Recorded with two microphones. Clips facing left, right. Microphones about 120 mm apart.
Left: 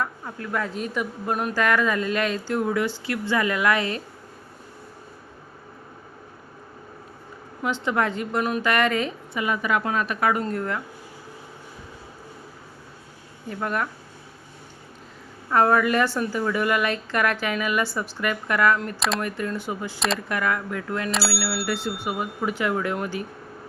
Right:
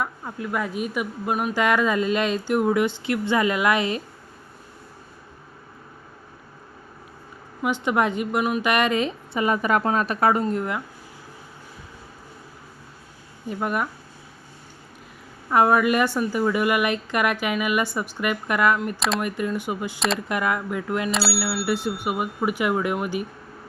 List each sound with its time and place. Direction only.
0.0 s a woman's voice: 15° right (ahead or behind)
1.6 s speech: 20° right (ahead or behind)
7.6 s a woman's voice: 15° right (ahead or behind)
9.4 s a woman's voice: 40° right (ahead or behind)
10.4 s a woman's voice: 15° right (ahead or behind)
13.5 s a woman's voice: 15° right (ahead or behind)
15.4 s a woman's voice: 15° right (ahead or behind)
18.8 s speech: 5° right (ahead or behind)
19.2 s a woman's voice: 15° right (ahead or behind)
21.3 s speech: centre (ahead or behind)
21.7 s a woman's voice: 15° right (ahead or behind)